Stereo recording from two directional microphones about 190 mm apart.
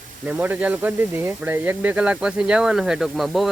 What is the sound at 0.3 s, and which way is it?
Speech, 10° right (ahead or behind).